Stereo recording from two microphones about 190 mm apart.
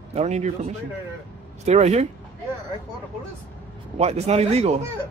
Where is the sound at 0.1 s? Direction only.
35° right (ahead or behind).